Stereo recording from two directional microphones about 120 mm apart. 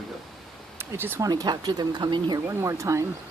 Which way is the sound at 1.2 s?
35° right (ahead or behind).